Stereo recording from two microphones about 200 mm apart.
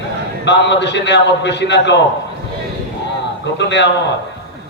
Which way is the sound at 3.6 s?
60° left (ahead or behind).